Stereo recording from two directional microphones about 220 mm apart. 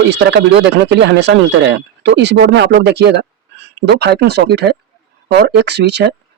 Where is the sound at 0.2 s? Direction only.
50° right (ahead or behind).